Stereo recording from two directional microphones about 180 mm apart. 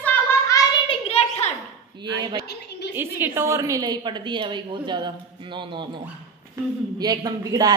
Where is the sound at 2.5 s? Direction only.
65° left (ahead or behind).